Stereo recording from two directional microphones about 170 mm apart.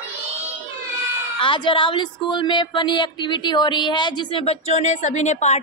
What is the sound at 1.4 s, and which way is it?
Speech, 30° left (ahead or behind).